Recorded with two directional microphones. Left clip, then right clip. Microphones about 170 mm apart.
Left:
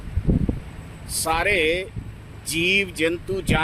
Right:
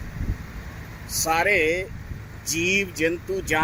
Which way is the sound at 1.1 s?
10° left (ahead or behind).